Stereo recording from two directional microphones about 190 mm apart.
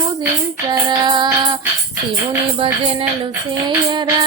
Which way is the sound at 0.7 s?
20° right (ahead or behind).